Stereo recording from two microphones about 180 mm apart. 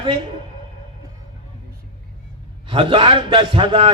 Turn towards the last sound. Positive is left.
turn(degrees=-30)  # may be behind; listen again after turning